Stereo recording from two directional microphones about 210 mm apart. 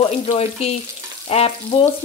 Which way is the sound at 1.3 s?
30° left (ahead or behind).